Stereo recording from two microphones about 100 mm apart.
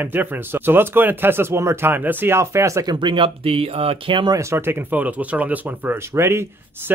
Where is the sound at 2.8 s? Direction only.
50° right (ahead or behind).